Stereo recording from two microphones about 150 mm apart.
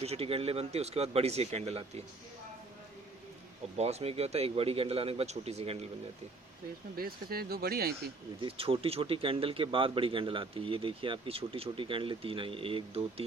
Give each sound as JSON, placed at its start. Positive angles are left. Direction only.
{"t": 0.0, "sound": "speech", "side_deg": -40}
{"t": 3.8, "sound": "a man's voice", "side_deg": -45}
{"t": 6.9, "sound": "speech", "side_deg": -80}
{"t": 8.4, "sound": "a man's voice", "side_deg": -40}